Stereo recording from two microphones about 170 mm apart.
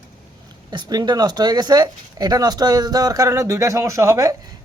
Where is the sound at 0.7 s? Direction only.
25° right (ahead or behind).